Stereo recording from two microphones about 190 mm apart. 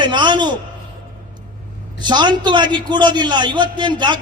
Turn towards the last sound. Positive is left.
turn(degrees=-25)  # may be behind; listen again after turning